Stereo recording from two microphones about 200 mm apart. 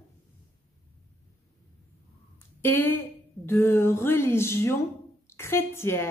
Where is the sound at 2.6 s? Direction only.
10° left (ahead or behind).